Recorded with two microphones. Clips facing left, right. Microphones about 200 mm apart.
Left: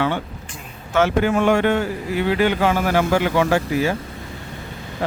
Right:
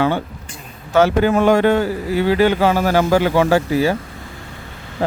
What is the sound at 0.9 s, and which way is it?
Speech, 35° right (ahead or behind).